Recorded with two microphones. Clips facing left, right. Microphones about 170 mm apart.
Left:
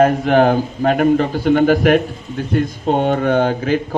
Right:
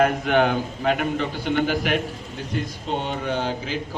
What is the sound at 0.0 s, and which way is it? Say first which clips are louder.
A man's voice: left 7 dB; 40° left (ahead or behind).